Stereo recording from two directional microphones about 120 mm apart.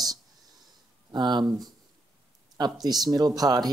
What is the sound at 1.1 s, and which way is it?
Speech, 35° right (ahead or behind).